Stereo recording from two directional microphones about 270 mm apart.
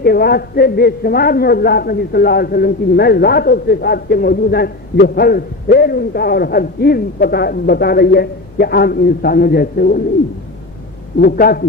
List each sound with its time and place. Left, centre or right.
0.0 s a man's voice: left
11.2 s a man's voice: left